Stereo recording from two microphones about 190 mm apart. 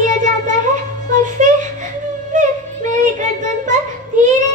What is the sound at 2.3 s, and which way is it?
Music, 40° right (ahead or behind).